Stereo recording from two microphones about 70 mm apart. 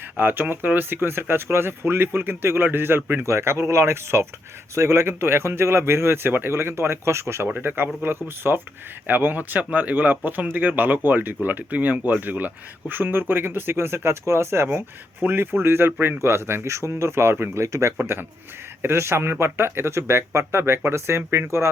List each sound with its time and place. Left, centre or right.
0.2 s speech: right
7.5 s speech: right